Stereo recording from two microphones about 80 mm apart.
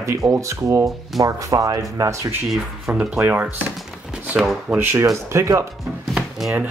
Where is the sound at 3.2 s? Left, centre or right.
Right.